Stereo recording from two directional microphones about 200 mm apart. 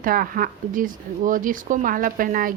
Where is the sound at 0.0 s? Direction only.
45° right (ahead or behind).